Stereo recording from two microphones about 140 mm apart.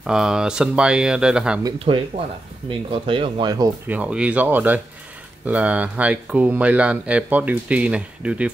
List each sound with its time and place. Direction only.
0.0 s speech: 5° right (ahead or behind)
1.9 s speech: 45° right (ahead or behind); by 3.7 s 30° right (ahead or behind)
3.8 s speech: 10° right (ahead or behind)